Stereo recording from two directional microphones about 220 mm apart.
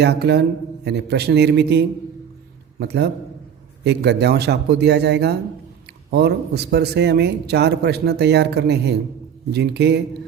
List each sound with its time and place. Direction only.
0.0 s a man's voice: 50° right (ahead or behind)